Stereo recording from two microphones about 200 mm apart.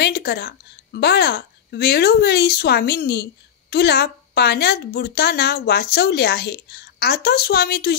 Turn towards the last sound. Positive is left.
turn(degrees=50)  # may be behind; listen again after turning